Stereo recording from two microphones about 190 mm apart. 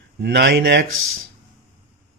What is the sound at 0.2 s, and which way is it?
Speech, 65° right (ahead or behind).